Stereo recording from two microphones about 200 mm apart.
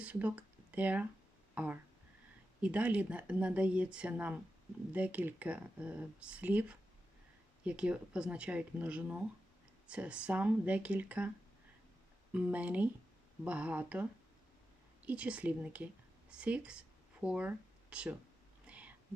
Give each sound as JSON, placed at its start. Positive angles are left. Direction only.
{"t": 0.0, "sound": "speech", "side_deg": -5}
{"t": 12.3, "sound": "speech", "side_deg": -5}
{"t": 18.6, "sound": "whispering", "side_deg": -5}